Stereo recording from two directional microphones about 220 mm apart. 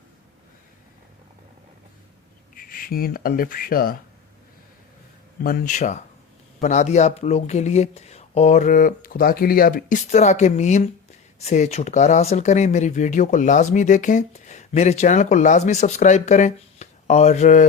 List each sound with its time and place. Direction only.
2.6 s speech: 40° left (ahead or behind)
5.4 s speech: 40° left (ahead or behind)